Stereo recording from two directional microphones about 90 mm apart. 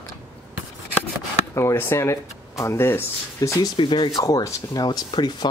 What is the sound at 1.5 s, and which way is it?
Speech, 30° left (ahead or behind).